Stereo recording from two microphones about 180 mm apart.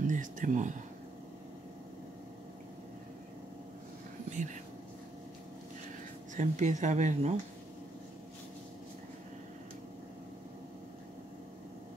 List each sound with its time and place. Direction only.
0.0 s speech: 45° right (ahead or behind)
6.3 s speech: 40° right (ahead or behind)